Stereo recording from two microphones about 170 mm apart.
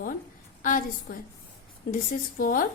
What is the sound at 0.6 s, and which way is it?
A woman's voice, 50° left (ahead or behind).